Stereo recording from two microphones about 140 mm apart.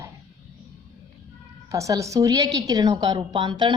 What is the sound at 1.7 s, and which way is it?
A woman's voice, 25° right (ahead or behind).